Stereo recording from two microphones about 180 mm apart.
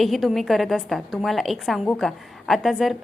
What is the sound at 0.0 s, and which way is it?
A woman's voice, centre (ahead or behind).